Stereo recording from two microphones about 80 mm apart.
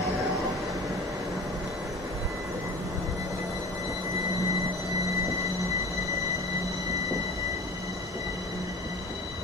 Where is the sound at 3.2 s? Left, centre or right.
Right.